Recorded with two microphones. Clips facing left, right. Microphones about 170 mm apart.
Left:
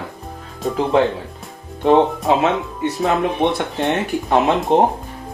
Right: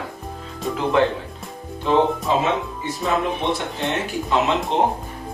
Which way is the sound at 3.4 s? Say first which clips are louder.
Left 5 dB; 55° left (ahead or behind).